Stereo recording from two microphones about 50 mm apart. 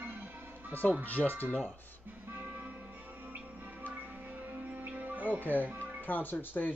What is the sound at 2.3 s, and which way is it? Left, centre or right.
Music, right.